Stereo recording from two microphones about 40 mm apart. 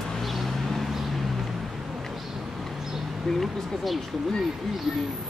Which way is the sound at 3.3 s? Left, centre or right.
Centre.